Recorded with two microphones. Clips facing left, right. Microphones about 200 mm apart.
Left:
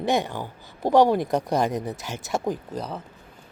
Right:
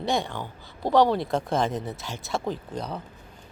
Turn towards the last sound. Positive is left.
turn(degrees=5)  # may be behind; listen again after turning